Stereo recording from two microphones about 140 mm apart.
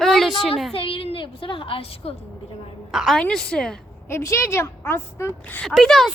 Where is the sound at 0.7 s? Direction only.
40° left (ahead or behind).